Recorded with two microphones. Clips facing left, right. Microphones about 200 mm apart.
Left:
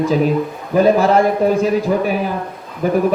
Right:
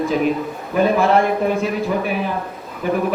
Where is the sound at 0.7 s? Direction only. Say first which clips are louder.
Left 3 dB; 40° left (ahead or behind).